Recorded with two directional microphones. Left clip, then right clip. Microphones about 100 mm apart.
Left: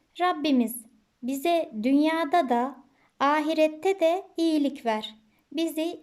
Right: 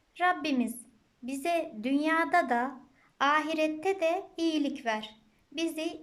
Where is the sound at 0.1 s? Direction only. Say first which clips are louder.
Left 3 dB; 45° left (ahead or behind).